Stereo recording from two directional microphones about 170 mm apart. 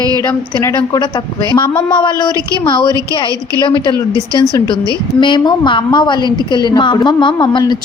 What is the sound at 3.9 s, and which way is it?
Speech, 20° right (ahead or behind).